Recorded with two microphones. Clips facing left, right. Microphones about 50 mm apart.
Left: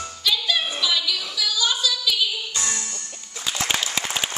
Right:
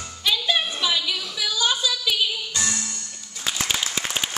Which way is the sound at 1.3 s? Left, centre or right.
Right.